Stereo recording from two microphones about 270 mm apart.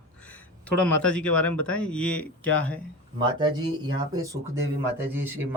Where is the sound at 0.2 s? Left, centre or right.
Centre.